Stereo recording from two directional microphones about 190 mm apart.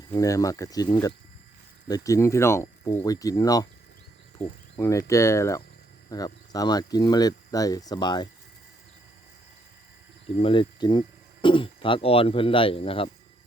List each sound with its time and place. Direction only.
0.1 s speech: 20° left (ahead or behind)
10.4 s speech: 25° left (ahead or behind)